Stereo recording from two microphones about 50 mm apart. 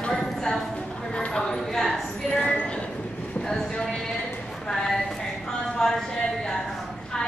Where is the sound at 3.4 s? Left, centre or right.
Centre.